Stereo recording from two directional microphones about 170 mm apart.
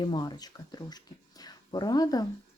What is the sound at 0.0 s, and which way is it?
Speech, 25° left (ahead or behind).